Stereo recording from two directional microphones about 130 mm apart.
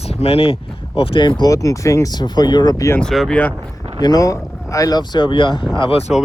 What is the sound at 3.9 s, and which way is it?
Speech, 30° left (ahead or behind).